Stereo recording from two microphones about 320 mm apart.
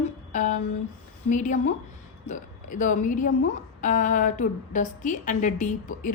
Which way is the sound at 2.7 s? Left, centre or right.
Left.